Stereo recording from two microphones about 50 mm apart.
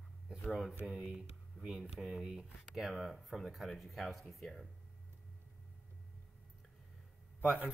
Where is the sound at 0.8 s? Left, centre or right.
Right; by 4.4 s centre.